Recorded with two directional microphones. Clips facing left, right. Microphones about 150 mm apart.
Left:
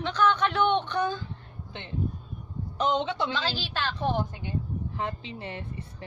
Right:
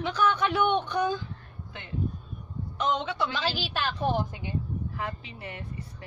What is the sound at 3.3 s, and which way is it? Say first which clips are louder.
A woman's voice: even; 10° right (ahead or behind).